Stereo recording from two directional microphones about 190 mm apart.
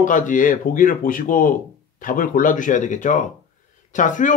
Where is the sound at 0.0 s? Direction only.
45° left (ahead or behind).